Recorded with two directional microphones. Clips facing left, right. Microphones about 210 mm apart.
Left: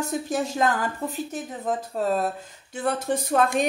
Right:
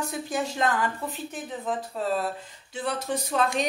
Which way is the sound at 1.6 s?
45° left (ahead or behind).